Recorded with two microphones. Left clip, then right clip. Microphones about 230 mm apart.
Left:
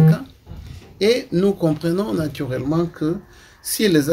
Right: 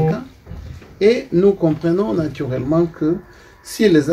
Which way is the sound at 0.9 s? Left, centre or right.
Left.